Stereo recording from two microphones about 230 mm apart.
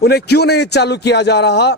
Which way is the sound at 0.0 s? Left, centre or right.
Left.